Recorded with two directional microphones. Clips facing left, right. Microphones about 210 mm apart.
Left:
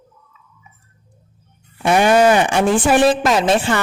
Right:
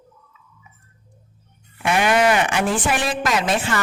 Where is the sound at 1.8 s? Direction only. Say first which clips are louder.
Left 5 dB; 30° left (ahead or behind).